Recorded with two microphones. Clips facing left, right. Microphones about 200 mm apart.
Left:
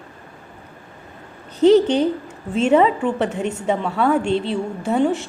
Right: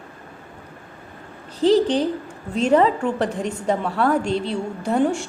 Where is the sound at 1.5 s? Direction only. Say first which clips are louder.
Left 4 dB; 35° right (ahead or behind).